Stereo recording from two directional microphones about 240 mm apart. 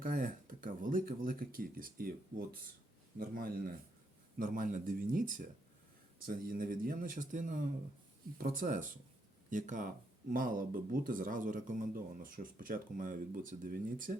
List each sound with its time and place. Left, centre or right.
0.0 s speech: right